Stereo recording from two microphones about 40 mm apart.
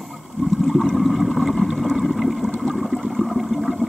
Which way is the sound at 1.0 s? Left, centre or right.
Centre.